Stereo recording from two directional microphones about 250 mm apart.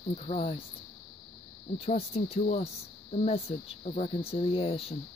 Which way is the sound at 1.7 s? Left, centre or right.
Left.